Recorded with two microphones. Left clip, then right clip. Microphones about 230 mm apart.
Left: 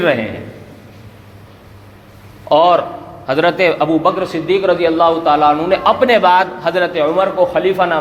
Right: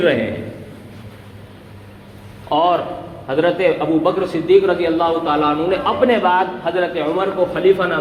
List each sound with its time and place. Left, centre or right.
2.5 s a man's voice: left